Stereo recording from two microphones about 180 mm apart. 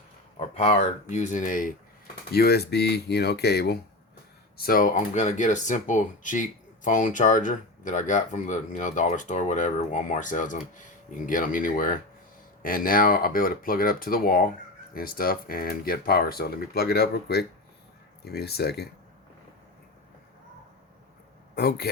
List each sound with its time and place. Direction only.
0.3 s speech: 35° left (ahead or behind)
2.3 s speech: 60° left (ahead or behind)
4.6 s speech: 50° left (ahead or behind)
21.5 s a man's voice: 60° left (ahead or behind)